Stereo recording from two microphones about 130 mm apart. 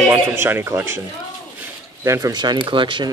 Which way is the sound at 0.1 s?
20° right (ahead or behind).